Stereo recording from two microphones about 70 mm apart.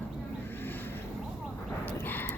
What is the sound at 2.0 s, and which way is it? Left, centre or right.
Clip-clop, left.